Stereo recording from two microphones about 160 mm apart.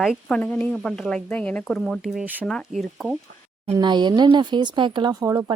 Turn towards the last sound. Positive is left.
turn(degrees=-20)  # may be behind; listen again after turning